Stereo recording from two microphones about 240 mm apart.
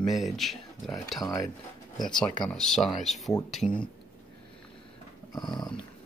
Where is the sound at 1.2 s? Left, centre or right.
Centre.